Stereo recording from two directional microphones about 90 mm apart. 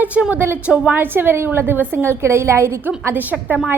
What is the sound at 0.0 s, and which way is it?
A woman's voice, 15° right (ahead or behind).